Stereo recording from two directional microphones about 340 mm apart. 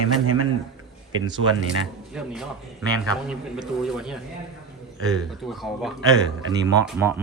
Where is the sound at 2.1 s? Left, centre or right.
Centre.